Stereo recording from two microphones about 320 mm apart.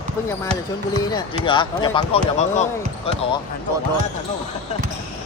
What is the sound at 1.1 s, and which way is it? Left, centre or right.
Speech, centre.